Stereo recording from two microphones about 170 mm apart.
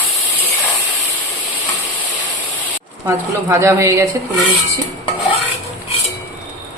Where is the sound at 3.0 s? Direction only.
15° right (ahead or behind).